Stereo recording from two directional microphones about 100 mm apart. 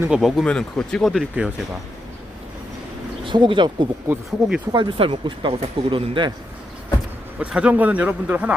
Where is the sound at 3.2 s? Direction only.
55° right (ahead or behind).